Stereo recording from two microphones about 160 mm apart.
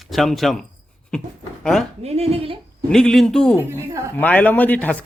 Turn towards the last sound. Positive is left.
turn(degrees=10)  # may be behind; listen again after turning